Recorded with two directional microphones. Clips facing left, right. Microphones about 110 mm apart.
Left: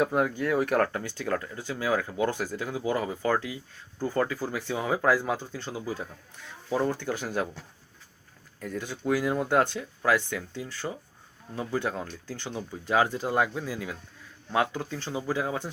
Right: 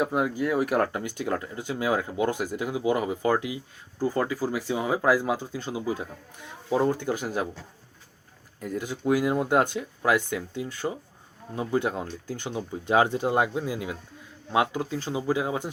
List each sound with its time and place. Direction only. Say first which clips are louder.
0.0 s speech: even; 10° right (ahead or behind)
8.6 s speech: right 3 dB; 15° right (ahead or behind)